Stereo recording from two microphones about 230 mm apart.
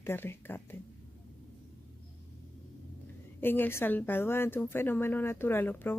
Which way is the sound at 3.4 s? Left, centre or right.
Centre.